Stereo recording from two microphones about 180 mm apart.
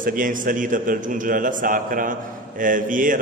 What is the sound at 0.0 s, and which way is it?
A man's voice, 50° right (ahead or behind).